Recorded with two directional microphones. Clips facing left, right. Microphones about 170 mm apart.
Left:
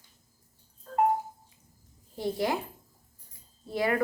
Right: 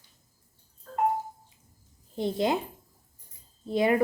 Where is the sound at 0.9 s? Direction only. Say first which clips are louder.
Left 4 dB; 20° left (ahead or behind).